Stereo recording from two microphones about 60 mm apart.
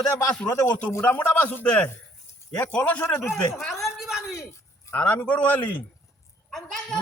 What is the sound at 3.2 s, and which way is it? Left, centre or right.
Speech, left.